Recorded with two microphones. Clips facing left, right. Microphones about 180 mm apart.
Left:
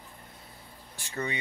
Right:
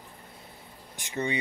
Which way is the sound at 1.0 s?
20° right (ahead or behind).